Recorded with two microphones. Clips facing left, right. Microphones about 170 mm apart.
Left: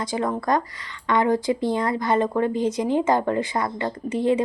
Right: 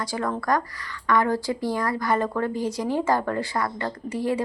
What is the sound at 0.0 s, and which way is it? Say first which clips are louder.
A woman's voice: left 3 dB; 20° left (ahead or behind).